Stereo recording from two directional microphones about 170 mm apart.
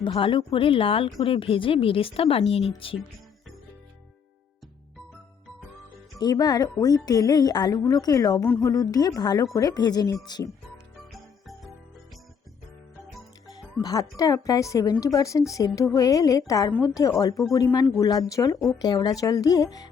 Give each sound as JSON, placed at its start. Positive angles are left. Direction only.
{"t": 0.0, "sound": "a woman's voice", "side_deg": 30}
{"t": 6.1, "sound": "speech", "side_deg": 20}
{"t": 11.1, "sound": "music", "side_deg": 0}
{"t": 13.8, "sound": "speech", "side_deg": 20}